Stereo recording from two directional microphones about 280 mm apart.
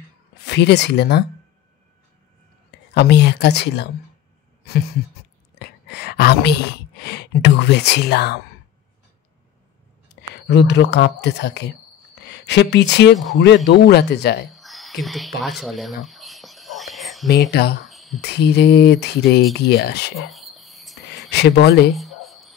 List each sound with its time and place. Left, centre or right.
0.4 s speech: left
2.9 s speech: left
10.3 s speech: left
14.5 s a sound: centre
15.4 s whispering: centre
17.3 s speech: left
17.8 s a sound: centre
18.2 s speech: left
20.2 s cricket: centre
21.1 s speech: left
21.9 s a sound: centre